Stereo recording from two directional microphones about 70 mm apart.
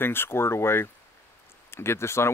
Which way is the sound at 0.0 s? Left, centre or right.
Left.